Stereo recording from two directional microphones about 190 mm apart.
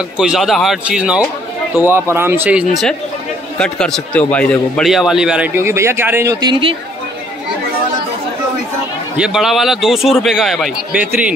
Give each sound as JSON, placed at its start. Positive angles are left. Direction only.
{"t": 0.2, "sound": "a man's voice", "side_deg": 0}
{"t": 6.5, "sound": "speech", "side_deg": -30}
{"t": 9.1, "sound": "a man's voice", "side_deg": -5}